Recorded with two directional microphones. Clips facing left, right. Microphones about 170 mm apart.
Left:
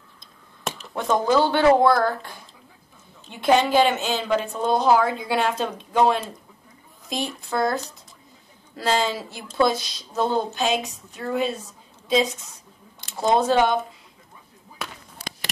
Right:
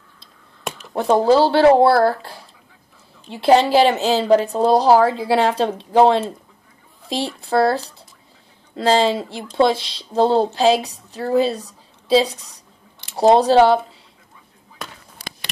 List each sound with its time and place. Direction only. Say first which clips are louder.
0.9 s a woman's voice: right 6 dB; 30° right (ahead or behind)